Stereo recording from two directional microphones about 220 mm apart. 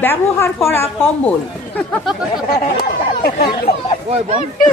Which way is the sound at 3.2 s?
45° left (ahead or behind).